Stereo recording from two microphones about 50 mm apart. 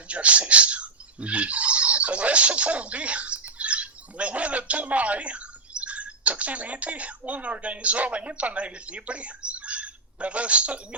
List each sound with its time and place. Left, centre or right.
0.1 s speech: right